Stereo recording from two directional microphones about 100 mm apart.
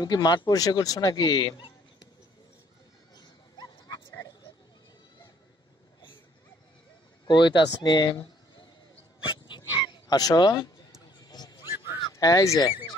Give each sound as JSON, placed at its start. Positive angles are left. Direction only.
{"t": 0.0, "sound": "speech", "side_deg": 45}
{"t": 3.2, "sound": "dog", "side_deg": 40}
{"t": 7.2, "sound": "a man's voice", "side_deg": 50}
{"t": 9.2, "sound": "dog", "side_deg": 60}
{"t": 9.8, "sound": "speech", "side_deg": 50}
{"t": 11.2, "sound": "dog", "side_deg": 45}
{"t": 11.9, "sound": "fowl", "side_deg": 35}